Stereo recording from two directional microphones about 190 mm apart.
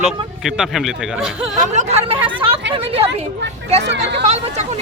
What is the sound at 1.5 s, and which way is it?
Speech, 40° right (ahead or behind).